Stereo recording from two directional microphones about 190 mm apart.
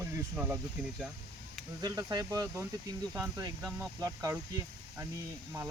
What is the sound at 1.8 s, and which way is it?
Speech, 20° right (ahead or behind).